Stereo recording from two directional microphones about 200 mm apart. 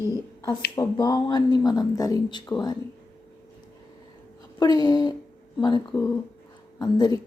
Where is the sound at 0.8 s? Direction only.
20° left (ahead or behind).